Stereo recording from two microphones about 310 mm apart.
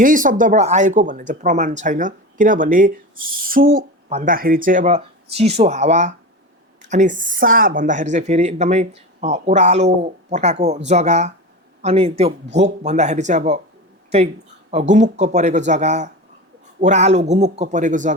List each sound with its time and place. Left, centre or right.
0.0 s a woman's voice: right
14.7 s speech: right